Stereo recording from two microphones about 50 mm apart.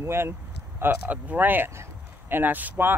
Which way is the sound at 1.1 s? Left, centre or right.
Right.